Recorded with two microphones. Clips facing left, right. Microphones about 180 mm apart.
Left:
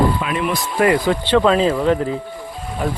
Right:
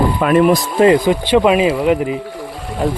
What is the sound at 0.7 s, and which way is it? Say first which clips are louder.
Speech: right 2 dB; 20° right (ahead or behind).